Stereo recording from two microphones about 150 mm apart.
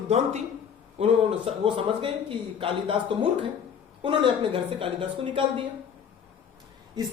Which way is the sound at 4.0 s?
35° right (ahead or behind).